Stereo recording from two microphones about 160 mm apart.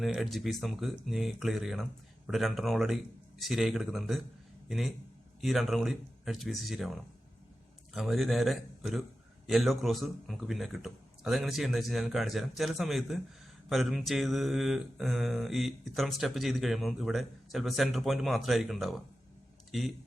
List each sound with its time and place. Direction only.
0.0 s mantra: centre (ahead or behind)
5.4 s mantra: centre (ahead or behind)